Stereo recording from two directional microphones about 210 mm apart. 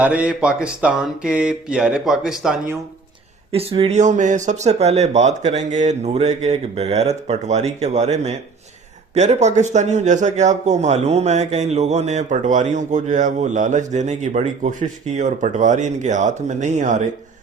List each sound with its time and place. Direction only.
0.0 s speech: 5° right (ahead or behind)
3.5 s a man's voice: 25° right (ahead or behind)